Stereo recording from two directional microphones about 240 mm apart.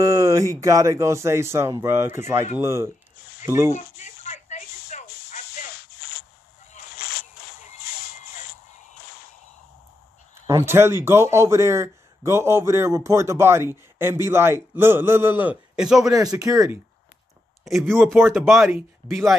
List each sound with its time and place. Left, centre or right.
0.0 s a sound: centre
0.6 s speech: centre
4.0 s a sound: left
10.4 s speech: centre
16.1 s speech: centre
17.6 s speech: centre
18.1 s speech: centre